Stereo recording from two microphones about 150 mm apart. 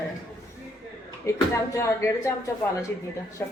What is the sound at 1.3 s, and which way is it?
Speech, 20° left (ahead or behind).